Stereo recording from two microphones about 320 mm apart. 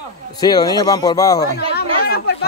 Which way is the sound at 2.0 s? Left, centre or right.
Left.